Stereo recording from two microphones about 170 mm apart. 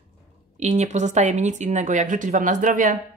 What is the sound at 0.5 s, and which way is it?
Speech, 40° right (ahead or behind).